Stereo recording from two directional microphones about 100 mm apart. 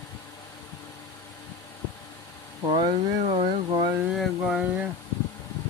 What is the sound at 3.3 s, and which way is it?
Speech, 65° right (ahead or behind).